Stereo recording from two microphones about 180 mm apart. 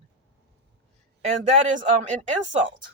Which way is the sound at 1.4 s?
45° right (ahead or behind).